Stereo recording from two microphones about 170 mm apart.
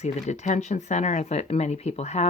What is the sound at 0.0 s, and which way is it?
Speech, 40° left (ahead or behind).